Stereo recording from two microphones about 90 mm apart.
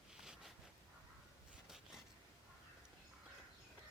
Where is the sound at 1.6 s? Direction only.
5° right (ahead or behind).